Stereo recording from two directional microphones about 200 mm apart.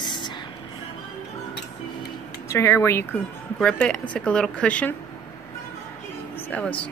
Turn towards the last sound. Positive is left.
turn(degrees=5)  # may be behind; listen again after turning